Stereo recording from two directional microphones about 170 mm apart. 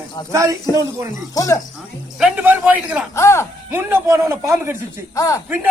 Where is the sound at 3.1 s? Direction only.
15° left (ahead or behind).